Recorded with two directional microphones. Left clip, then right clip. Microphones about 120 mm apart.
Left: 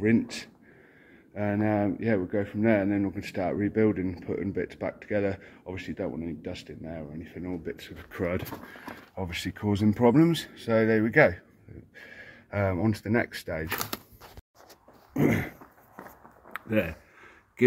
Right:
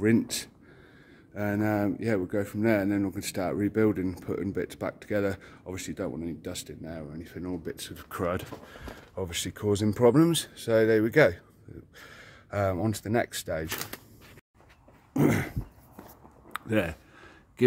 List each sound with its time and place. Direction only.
0.0 s speech: 65° right (ahead or behind)
1.3 s speech: 35° right (ahead or behind)
7.2 s speech: 55° right (ahead or behind); by 13.7 s 35° right (ahead or behind)
15.1 s dog: 45° right (ahead or behind)
16.5 s a sound: 45° right (ahead or behind)